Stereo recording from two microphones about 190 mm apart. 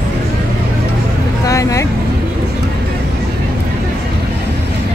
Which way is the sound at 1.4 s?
15° left (ahead or behind).